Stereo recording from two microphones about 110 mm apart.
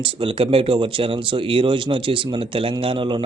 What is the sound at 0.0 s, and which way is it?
Speech, 55° right (ahead or behind).